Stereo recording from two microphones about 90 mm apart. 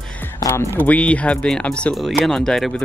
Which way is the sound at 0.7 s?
15° left (ahead or behind).